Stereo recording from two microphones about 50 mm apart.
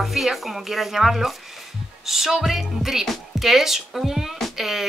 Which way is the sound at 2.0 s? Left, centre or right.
Centre.